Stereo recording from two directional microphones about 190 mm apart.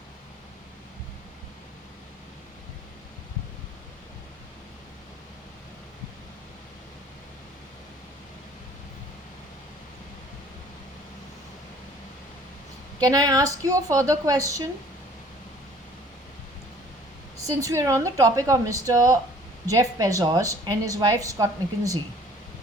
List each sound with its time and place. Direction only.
13.0 s a woman's voice: 20° right (ahead or behind)
17.4 s speech: 15° right (ahead or behind)